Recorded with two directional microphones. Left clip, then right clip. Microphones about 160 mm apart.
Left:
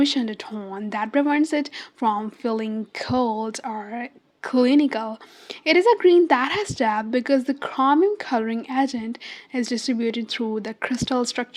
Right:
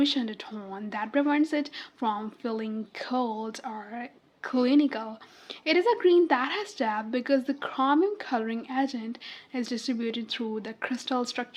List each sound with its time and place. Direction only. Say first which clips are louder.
0.0 s speech: left 5 dB; 45° left (ahead or behind)